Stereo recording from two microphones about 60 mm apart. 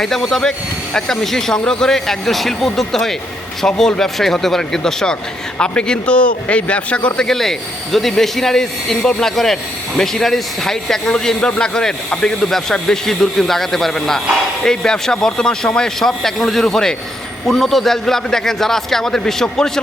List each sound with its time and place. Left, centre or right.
0.0 s a man's voice: centre
7.3 s speech: centre